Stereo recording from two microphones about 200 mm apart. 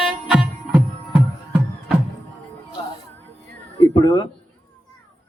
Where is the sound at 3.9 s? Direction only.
20° left (ahead or behind).